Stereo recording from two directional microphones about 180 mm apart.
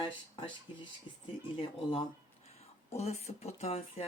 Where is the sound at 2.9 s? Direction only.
35° left (ahead or behind).